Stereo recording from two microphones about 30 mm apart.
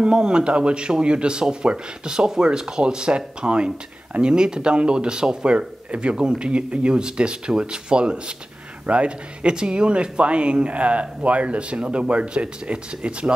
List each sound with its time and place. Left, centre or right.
0.0 s speech: right
5.5 s speech: right